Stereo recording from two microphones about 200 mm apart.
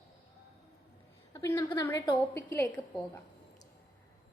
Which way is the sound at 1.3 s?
15° left (ahead or behind).